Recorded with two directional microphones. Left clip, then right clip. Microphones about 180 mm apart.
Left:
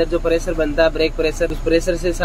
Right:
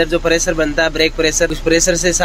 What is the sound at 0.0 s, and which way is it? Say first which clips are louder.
Speech: right 4 dB; 10° right (ahead or behind).